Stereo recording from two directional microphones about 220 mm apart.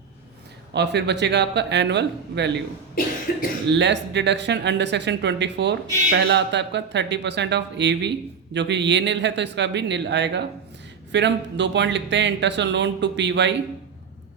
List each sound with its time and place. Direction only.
0.7 s speech: 50° right (ahead or behind)
3.3 s speech: 45° left (ahead or behind)
3.7 s speech: 55° right (ahead or behind)